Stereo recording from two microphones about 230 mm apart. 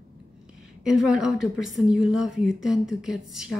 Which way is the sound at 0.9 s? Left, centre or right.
Centre.